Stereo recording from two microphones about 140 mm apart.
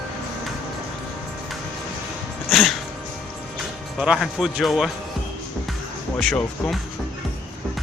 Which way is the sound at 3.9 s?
5° right (ahead or behind).